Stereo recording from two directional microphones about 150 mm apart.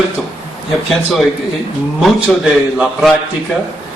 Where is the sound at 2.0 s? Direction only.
5° right (ahead or behind).